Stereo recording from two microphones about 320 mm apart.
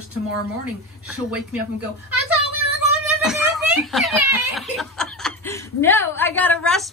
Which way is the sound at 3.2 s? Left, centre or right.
Centre.